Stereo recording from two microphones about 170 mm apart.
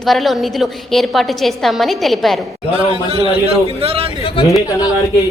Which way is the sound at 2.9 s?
35° right (ahead or behind).